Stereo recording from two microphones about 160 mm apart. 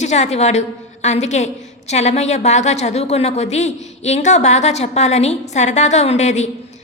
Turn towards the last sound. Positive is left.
turn(degrees=45)  # may be behind; listen again after turning